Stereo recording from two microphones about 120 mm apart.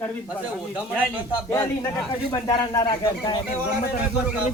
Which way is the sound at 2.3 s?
35° left (ahead or behind).